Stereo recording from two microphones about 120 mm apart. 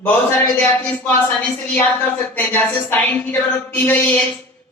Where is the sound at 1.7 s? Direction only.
15° left (ahead or behind).